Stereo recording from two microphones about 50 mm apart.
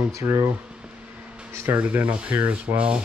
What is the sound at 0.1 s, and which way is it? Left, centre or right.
Speech, right.